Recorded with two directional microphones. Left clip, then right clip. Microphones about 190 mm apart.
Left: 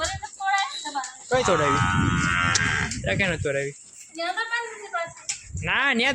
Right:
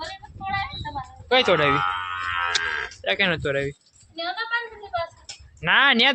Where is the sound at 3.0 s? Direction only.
10° right (ahead or behind).